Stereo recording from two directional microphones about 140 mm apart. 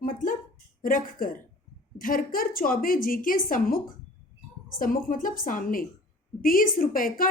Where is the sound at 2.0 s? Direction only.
90° left.